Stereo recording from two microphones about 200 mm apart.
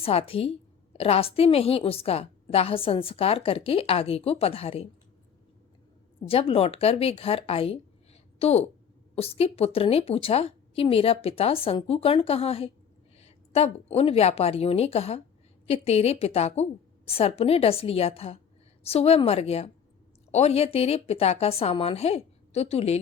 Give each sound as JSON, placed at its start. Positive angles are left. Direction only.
{"t": 0.0, "sound": "a woman's voice", "side_deg": 30}
{"t": 6.1, "sound": "a woman's voice", "side_deg": 30}